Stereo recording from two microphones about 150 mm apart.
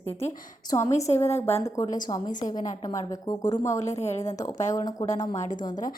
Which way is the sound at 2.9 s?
25° left (ahead or behind).